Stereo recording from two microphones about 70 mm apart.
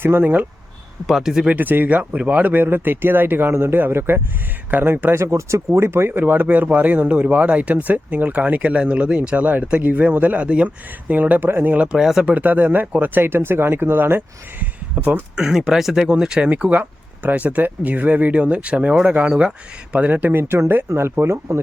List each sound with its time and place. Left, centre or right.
0.0 s speech: right
1.0 s speech: centre
1.5 s speech: right
5.1 s speech: right; by 12.2 s centre
12.2 s speech: right
15.4 s speech: centre
19.3 s speech: centre
19.9 s speech: right
20.4 s speech: right